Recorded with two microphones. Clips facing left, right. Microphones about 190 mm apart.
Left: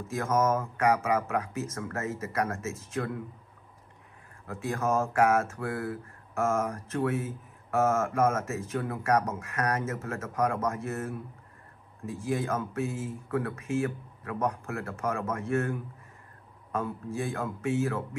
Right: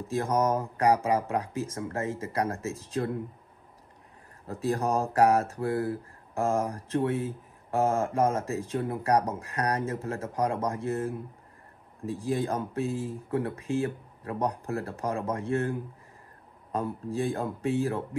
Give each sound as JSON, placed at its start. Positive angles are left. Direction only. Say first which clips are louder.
{"t": 0.0, "sound": "speech", "louder": "right 1 dB", "side_deg": -35}
{"t": 4.5, "sound": "speech", "louder": "right 2 dB", "side_deg": -35}